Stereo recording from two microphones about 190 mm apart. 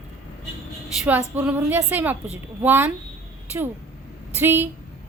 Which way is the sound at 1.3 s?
10° right (ahead or behind).